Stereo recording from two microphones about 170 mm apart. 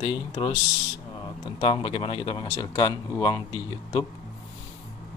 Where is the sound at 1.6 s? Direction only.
30° left (ahead or behind).